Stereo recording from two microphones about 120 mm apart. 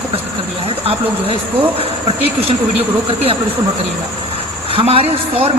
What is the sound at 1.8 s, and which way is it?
Speech, 55° right (ahead or behind).